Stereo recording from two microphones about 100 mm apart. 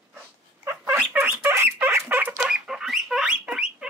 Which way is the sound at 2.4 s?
5° right (ahead or behind).